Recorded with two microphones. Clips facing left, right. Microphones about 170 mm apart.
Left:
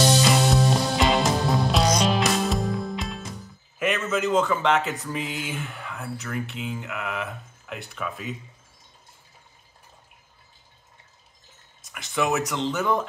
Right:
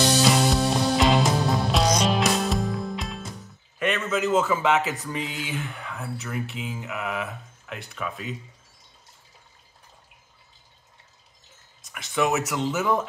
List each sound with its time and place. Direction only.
0.0 s music: centre (ahead or behind)
11.8 s speech: centre (ahead or behind)